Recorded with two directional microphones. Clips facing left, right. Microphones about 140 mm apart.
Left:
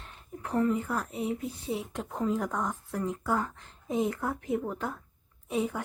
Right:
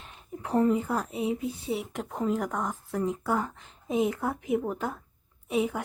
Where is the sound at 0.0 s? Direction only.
20° right (ahead or behind).